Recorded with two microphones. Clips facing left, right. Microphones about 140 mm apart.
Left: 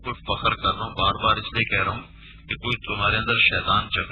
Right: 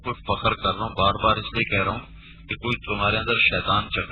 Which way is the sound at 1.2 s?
30° right (ahead or behind).